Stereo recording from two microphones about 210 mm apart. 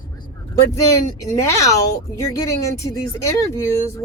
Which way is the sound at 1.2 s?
15° left (ahead or behind).